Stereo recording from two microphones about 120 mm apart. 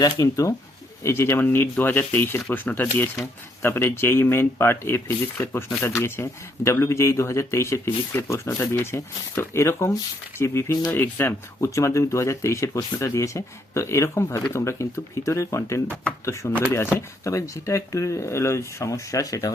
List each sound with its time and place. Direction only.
0.0 s speech: 30° left (ahead or behind)
16.5 s speech: 15° right (ahead or behind)
17.2 s speech: 25° left (ahead or behind)